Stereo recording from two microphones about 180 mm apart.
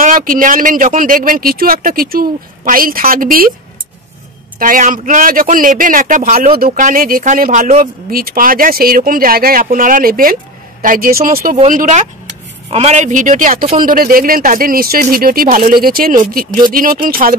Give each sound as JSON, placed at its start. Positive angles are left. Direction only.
{"t": 0.0, "sound": "speech", "side_deg": -50}
{"t": 4.6, "sound": "speech", "side_deg": -50}